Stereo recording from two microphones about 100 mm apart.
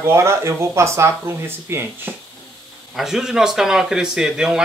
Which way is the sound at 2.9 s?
5° right (ahead or behind).